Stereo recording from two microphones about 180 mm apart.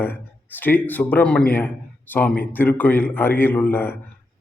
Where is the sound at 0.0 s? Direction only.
10° left (ahead or behind).